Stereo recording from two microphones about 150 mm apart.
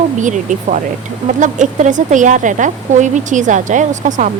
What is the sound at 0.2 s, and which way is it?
Speech, 55° right (ahead or behind).